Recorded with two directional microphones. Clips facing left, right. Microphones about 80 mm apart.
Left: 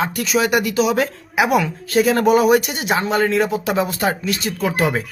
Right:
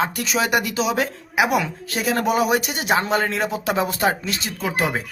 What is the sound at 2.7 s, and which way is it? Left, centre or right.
Speech, right.